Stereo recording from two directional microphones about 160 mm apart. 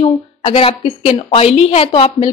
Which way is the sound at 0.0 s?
35° left (ahead or behind).